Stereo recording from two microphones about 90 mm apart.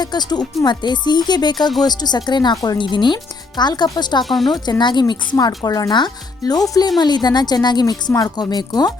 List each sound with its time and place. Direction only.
0.0 s a woman's voice: 50° left (ahead or behind)
4.2 s a woman's voice: centre (ahead or behind)
4.4 s a woman's voice: 50° left (ahead or behind)